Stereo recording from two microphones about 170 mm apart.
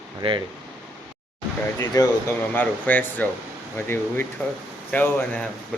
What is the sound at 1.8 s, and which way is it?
Speech, 20° left (ahead or behind).